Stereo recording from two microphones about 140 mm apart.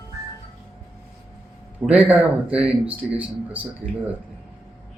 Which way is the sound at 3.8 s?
75° right (ahead or behind).